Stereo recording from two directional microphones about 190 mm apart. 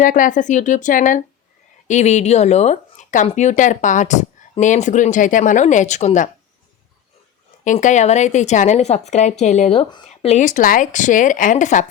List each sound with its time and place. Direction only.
0.0 s speech: 45° left (ahead or behind)
7.6 s speech: 40° left (ahead or behind)